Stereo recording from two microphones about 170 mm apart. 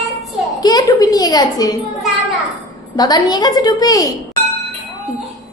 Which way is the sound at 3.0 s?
20° left (ahead or behind).